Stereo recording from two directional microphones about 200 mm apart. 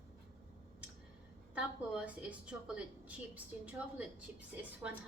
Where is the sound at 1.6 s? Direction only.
5° right (ahead or behind).